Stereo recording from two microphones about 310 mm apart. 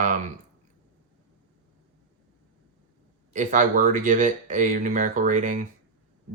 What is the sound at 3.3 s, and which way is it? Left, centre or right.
Speech, right.